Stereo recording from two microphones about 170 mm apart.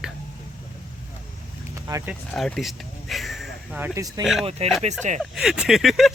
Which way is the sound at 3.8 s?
20° right (ahead or behind).